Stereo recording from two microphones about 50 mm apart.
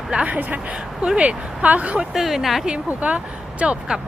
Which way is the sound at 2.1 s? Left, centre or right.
Centre.